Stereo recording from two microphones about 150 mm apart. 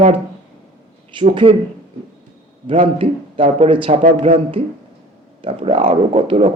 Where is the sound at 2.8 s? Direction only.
35° right (ahead or behind).